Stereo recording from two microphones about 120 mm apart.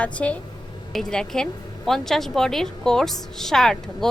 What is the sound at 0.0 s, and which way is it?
Speech, 10° left (ahead or behind).